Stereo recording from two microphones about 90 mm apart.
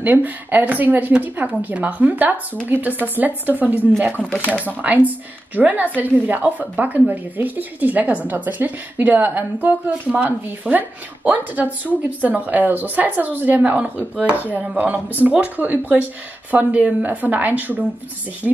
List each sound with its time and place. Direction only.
0.0 s a woman's voice: 20° right (ahead or behind)
4.1 s speech: 15° left (ahead or behind)
4.6 s a woman's voice: 20° right (ahead or behind)
18.4 s speech: 10° left (ahead or behind)